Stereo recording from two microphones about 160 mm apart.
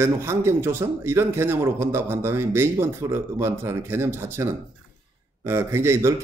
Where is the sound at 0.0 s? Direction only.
15° right (ahead or behind).